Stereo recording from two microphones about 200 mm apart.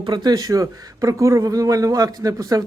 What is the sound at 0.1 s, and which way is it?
A man's voice, 20° right (ahead or behind).